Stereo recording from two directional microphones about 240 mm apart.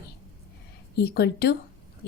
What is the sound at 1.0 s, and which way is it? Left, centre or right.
Speech, left.